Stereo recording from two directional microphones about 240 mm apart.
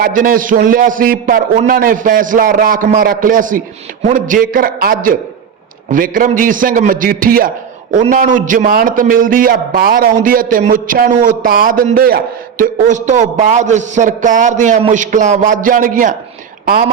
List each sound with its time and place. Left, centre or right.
0.0 s a man's voice: right